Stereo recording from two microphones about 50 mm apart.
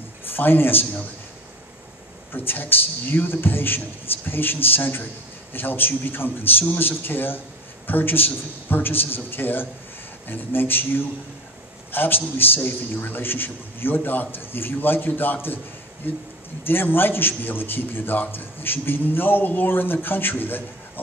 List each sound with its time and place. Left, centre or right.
0.3 s a man's voice: left
2.3 s a man's voice: left
16.6 s a man's voice: left